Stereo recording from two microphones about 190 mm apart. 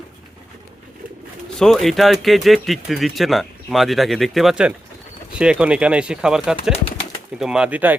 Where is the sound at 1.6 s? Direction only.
Centre (ahead or behind).